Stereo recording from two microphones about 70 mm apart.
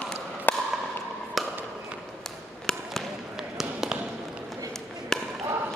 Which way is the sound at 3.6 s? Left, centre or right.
Centre.